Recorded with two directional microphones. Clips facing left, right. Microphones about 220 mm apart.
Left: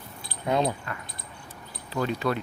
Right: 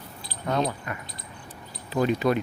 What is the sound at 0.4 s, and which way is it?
Speech, 15° left (ahead or behind).